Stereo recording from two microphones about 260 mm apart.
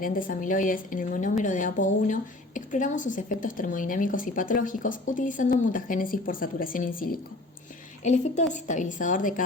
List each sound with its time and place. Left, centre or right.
0.0 s a woman's voice: left